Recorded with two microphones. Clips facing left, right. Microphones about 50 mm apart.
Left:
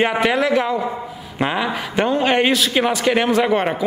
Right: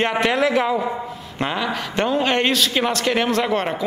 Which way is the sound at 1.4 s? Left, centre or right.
Centre.